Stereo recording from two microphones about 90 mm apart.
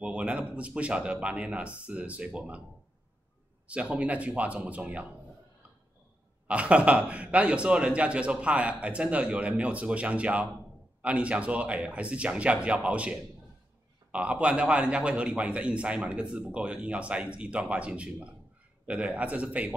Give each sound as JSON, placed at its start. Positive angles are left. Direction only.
{"t": 0.0, "sound": "a man's voice", "side_deg": -15}
{"t": 3.6, "sound": "a man's voice", "side_deg": -15}
{"t": 6.4, "sound": "a man's voice", "side_deg": -15}